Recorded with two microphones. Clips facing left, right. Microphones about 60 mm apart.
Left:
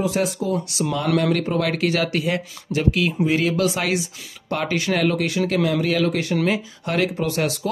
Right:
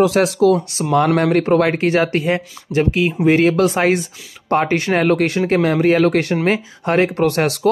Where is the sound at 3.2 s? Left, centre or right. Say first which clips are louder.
Right 8 dB; right.